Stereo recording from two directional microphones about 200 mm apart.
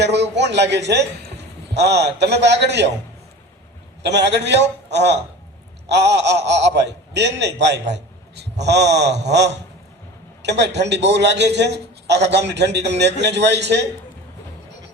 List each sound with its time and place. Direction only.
0.0 s a man's voice: 60° right (ahead or behind)
4.0 s a man's voice: 60° right (ahead or behind)